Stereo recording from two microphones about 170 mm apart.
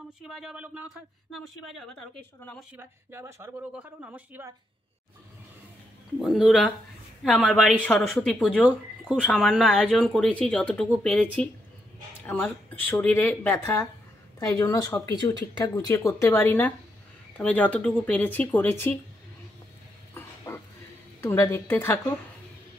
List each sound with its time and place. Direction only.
0.2 s speech: centre (ahead or behind)
2.7 s speech: 15° right (ahead or behind)
6.2 s speech: centre (ahead or behind)
20.2 s a sound: 15° left (ahead or behind)
21.2 s speech: 15° left (ahead or behind)